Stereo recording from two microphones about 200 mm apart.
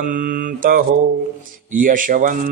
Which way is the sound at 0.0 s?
45° right (ahead or behind).